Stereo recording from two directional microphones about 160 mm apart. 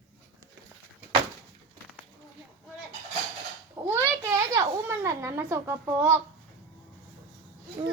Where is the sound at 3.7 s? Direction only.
15° right (ahead or behind).